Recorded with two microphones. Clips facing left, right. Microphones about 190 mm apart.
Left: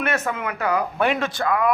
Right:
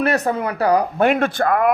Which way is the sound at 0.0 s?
35° right (ahead or behind).